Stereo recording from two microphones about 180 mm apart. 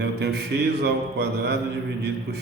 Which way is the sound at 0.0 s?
65° right (ahead or behind).